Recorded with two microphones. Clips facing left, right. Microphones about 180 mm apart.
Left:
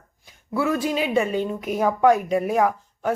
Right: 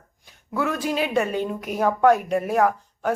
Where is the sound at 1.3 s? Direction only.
10° right (ahead or behind).